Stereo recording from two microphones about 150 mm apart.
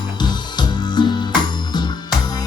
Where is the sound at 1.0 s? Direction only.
30° left (ahead or behind).